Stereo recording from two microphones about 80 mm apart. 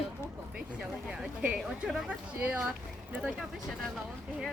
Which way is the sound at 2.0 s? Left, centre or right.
Centre.